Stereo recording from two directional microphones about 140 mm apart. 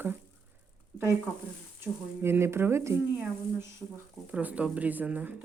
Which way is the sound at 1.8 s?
15° right (ahead or behind).